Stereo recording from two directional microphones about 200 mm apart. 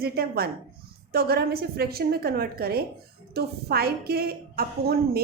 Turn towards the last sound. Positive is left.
turn(degrees=-50)  # may be behind; listen again after turning